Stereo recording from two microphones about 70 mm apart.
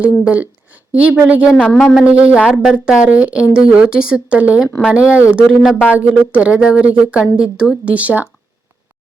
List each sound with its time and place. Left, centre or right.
0.0 s a woman's voice: centre
1.8 s speech: centre
2.0 s speech: centre